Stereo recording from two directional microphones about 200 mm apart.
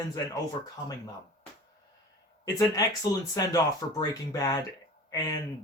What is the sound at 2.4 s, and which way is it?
Speech, 15° left (ahead or behind).